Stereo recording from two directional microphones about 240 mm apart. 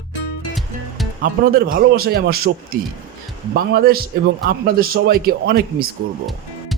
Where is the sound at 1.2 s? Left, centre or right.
Right.